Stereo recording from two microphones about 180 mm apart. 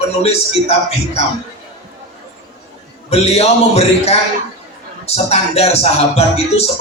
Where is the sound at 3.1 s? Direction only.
35° left (ahead or behind).